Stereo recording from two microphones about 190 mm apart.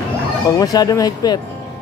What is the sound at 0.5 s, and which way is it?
Speech, 20° left (ahead or behind).